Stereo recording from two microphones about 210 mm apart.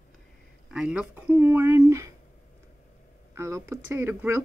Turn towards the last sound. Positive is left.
turn(degrees=-10)  # may be behind; listen again after turning